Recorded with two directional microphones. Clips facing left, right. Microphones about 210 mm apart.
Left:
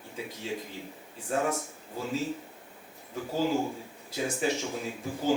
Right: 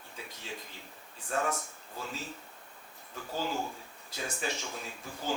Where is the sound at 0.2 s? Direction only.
5° left (ahead or behind).